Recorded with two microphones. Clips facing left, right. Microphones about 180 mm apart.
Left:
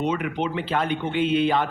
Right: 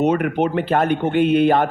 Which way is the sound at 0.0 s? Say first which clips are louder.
Right 7 dB; 50° right (ahead or behind).